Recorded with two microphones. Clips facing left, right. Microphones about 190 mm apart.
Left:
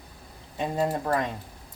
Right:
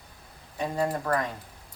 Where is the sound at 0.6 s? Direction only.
20° left (ahead or behind).